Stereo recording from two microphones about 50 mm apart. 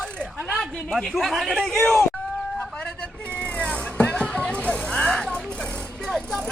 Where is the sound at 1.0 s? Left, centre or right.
Centre.